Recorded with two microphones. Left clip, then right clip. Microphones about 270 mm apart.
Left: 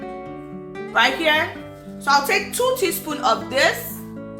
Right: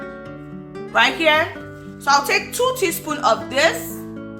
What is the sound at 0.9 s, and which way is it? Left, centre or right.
A woman's voice, right.